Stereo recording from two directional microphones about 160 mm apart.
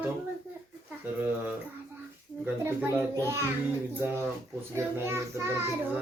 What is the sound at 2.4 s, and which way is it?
Child singing, 15° right (ahead or behind).